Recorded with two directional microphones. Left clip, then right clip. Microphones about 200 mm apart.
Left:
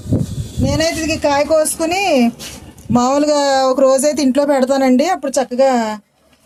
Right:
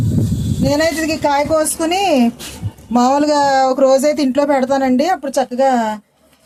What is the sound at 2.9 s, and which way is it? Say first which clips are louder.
Speech: even; 30° left (ahead or behind).